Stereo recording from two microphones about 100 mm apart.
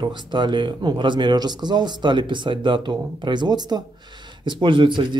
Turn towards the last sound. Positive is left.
turn(degrees=-55)  # may be behind; listen again after turning